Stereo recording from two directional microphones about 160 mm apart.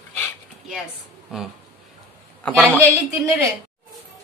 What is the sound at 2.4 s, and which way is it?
Speech, 10° left (ahead or behind).